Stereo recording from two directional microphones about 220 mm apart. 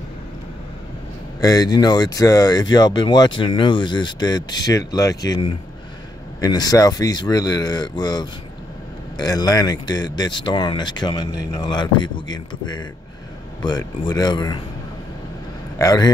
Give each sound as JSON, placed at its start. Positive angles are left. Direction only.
{"t": 1.4, "sound": "speech", "side_deg": 15}
{"t": 15.8, "sound": "speech", "side_deg": 15}